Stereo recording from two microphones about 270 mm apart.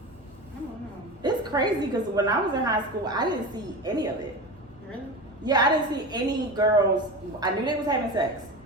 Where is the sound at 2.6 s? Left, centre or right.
Centre.